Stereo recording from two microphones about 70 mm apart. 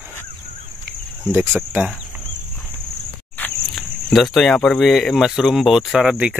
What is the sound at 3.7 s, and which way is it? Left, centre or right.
Speech, centre.